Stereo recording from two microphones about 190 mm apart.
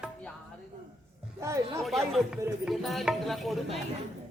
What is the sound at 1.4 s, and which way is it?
Speech, 15° right (ahead or behind).